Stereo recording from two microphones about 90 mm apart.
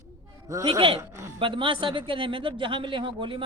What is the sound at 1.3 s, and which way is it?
A man's voice, 70° right (ahead or behind).